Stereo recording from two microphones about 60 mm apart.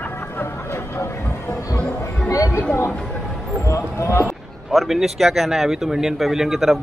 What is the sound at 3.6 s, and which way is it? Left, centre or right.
Speech, left.